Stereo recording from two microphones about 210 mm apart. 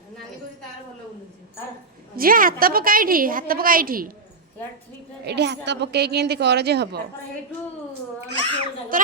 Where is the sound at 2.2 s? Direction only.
40° right (ahead or behind).